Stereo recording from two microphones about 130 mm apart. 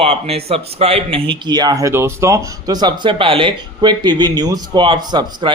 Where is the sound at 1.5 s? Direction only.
30° right (ahead or behind).